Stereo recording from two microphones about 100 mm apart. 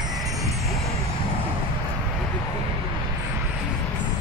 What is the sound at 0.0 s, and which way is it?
Music, 40° right (ahead or behind).